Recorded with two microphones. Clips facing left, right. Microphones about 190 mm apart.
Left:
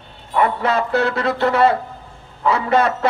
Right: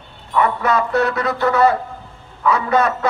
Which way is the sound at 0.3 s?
30° left (ahead or behind).